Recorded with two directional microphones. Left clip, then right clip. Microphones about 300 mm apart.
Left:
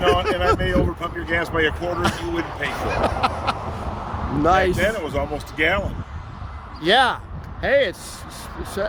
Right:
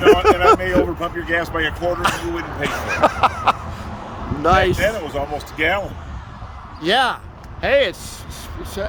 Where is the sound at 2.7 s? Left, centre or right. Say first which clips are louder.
Right 6 dB; centre.